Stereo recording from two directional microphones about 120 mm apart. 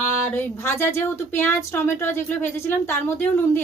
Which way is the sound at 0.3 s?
20° left (ahead or behind).